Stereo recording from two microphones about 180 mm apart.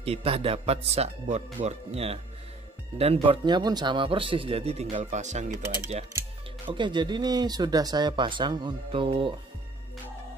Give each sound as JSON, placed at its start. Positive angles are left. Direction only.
{"t": 0.0, "sound": "speech", "side_deg": -30}
{"t": 6.7, "sound": "speech", "side_deg": -25}